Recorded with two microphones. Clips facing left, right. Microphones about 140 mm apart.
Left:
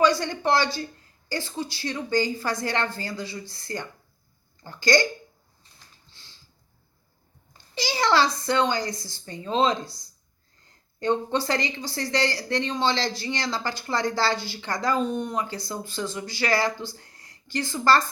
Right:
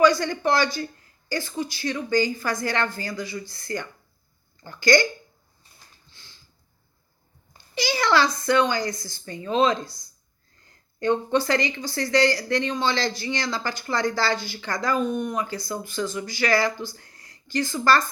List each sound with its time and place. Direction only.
0.0 s speech: 30° left (ahead or behind)
6.1 s sniff: 30° left (ahead or behind)
7.8 s speech: 30° left (ahead or behind)
11.0 s speech: 30° left (ahead or behind)